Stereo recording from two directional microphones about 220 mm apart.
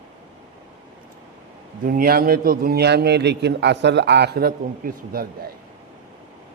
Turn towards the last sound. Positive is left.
turn(degrees=-40)  # may be behind; listen again after turning